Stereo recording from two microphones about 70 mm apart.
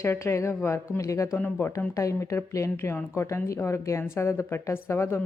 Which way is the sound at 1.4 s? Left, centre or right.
Left.